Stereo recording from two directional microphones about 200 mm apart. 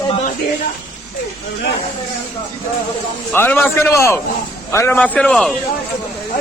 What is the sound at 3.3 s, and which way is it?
Turkey, 10° left (ahead or behind).